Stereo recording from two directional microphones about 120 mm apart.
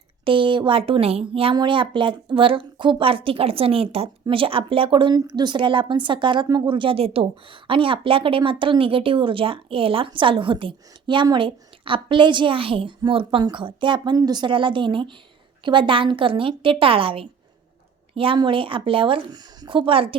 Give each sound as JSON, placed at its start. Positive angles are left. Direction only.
{"t": 0.3, "sound": "a woman's voice", "side_deg": -45}